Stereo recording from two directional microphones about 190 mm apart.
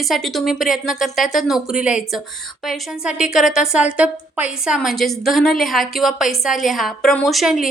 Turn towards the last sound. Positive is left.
turn(degrees=0)  # may be behind; listen again after turning